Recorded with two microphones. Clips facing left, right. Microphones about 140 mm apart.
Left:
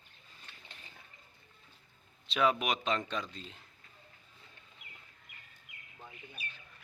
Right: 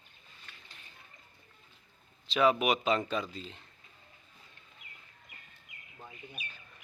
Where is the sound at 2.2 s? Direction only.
Centre (ahead or behind).